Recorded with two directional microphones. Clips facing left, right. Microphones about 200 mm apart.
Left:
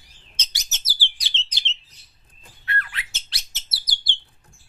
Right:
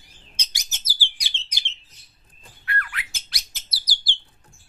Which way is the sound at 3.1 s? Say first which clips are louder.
Left 1 dB; 25° left (ahead or behind).